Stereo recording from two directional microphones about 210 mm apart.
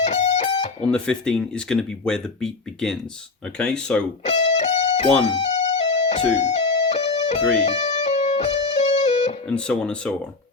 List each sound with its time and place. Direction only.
0.0 s music: 30° left (ahead or behind)
0.9 s speech: 5° left (ahead or behind)
4.2 s music: 35° left (ahead or behind)
9.5 s speech: 5° left (ahead or behind)